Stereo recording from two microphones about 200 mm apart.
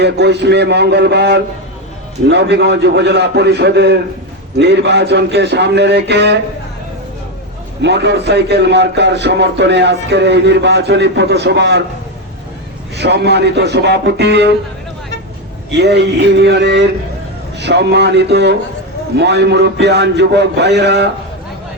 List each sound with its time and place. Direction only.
0.0 s a man's voice: 55° right (ahead or behind)
7.8 s a man's voice: 60° right (ahead or behind)
13.0 s a man's voice: 55° right (ahead or behind)
15.7 s a man's voice: 55° right (ahead or behind)